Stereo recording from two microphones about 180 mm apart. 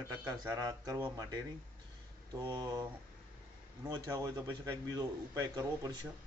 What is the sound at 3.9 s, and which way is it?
Speech, 20° right (ahead or behind).